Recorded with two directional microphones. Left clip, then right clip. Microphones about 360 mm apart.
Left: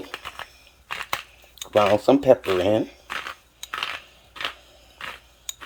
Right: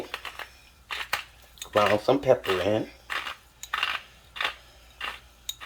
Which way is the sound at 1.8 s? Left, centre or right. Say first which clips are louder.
Left 5 dB; left.